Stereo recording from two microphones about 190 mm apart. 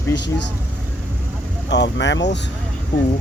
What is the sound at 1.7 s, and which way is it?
Speech, 65° left (ahead or behind).